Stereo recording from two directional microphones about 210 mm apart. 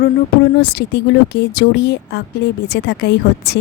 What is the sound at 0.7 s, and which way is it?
A woman's voice, 55° left (ahead or behind).